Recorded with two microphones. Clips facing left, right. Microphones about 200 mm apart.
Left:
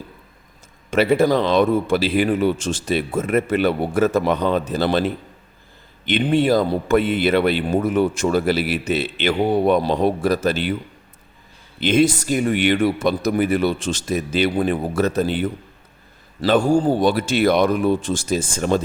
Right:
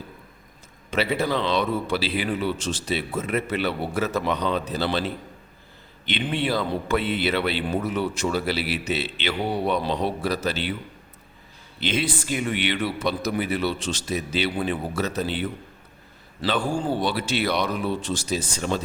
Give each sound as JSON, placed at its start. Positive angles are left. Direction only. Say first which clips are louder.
{"t": 0.9, "sound": "a man's voice", "louder": "left 8 dB", "side_deg": 50}
{"t": 11.8, "sound": "a man's voice", "louder": "left 9 dB", "side_deg": 50}